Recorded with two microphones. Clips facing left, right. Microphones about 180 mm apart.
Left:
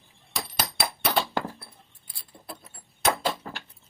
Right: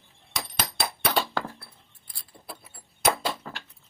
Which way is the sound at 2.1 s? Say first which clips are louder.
Left 1 dB; 5° right (ahead or behind).